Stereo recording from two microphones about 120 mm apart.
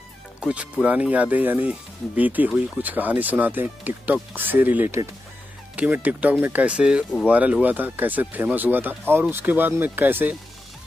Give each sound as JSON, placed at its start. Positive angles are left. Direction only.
{"t": 0.4, "sound": "speech", "side_deg": -10}